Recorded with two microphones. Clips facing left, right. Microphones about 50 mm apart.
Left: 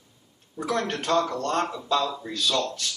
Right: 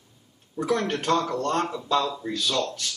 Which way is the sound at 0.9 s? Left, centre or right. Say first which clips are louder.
Even; centre.